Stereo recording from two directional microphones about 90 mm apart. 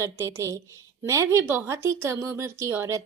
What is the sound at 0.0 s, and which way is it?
A woman's voice, 30° right (ahead or behind).